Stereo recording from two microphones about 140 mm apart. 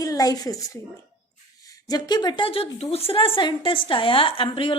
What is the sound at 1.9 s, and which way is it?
A woman's voice, 30° left (ahead or behind).